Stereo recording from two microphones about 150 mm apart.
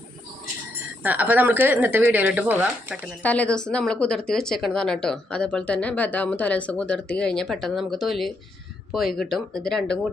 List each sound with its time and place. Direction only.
1.0 s a woman's voice: 10° right (ahead or behind)
3.2 s speech: 10° left (ahead or behind)